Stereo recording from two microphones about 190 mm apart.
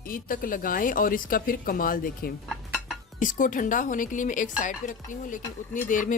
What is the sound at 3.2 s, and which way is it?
Speech, 45° left (ahead or behind).